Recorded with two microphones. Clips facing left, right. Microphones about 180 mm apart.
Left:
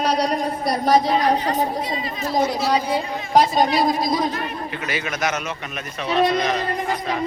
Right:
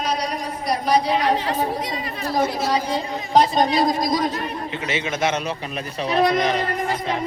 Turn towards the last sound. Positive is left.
turn(degrees=-35)  # may be behind; listen again after turning